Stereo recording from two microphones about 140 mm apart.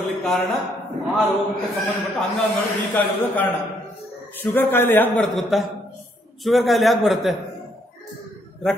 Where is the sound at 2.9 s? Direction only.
15° left (ahead or behind).